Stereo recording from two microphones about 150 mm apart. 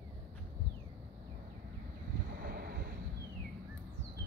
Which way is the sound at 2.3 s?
85° right.